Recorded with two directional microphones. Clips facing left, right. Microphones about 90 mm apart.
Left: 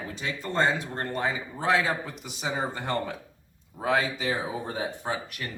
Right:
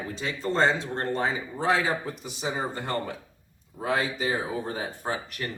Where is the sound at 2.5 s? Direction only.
25° left (ahead or behind).